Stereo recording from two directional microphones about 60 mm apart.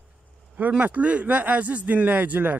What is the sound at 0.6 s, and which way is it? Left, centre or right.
Speech, right.